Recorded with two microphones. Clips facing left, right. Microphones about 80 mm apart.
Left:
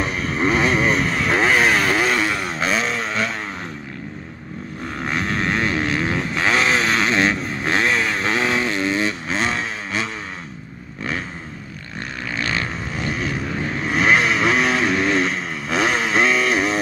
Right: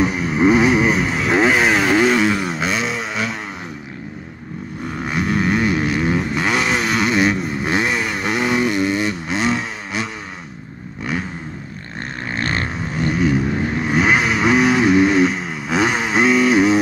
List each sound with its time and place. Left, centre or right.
0.0 s motorcycle: centre
4.9 s vehicle: centre
12.4 s vehicle: right
13.1 s vehicle: centre